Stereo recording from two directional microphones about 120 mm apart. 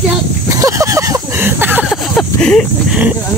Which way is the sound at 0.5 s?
25° right (ahead or behind).